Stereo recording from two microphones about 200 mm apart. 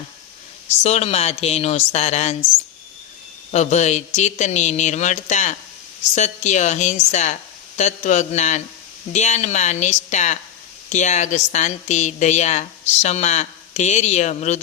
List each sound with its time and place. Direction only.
0.8 s a woman's voice: 30° left (ahead or behind)
3.5 s a woman's voice: 35° left (ahead or behind)